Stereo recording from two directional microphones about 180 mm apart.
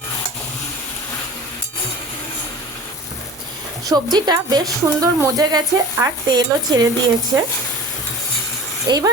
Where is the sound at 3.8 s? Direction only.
20° right (ahead or behind).